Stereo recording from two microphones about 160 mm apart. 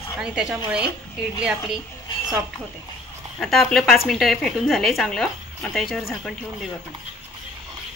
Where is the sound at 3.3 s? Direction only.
Centre (ahead or behind).